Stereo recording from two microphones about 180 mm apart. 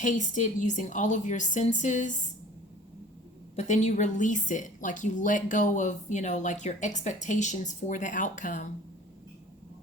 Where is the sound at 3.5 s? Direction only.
40° left (ahead or behind).